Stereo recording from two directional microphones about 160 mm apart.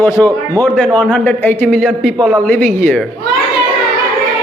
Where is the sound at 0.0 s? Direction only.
15° left (ahead or behind).